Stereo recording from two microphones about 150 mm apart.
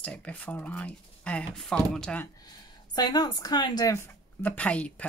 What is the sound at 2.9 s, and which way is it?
Speech, 30° left (ahead or behind).